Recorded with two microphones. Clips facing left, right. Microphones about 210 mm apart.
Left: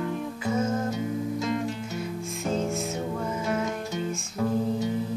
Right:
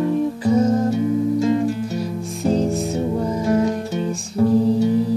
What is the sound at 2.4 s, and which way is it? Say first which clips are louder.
Music: right 9 dB; 35° right (ahead or behind).